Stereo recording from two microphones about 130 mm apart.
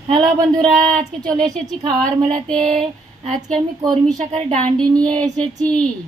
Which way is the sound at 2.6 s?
60° right (ahead or behind).